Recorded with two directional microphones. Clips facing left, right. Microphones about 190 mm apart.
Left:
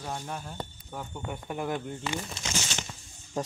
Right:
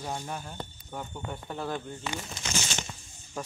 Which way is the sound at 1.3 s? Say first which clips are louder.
Left 3 dB; 15° left (ahead or behind).